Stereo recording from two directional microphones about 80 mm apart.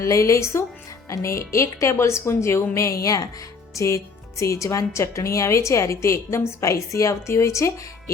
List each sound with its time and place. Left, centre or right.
0.0 s a woman's voice: left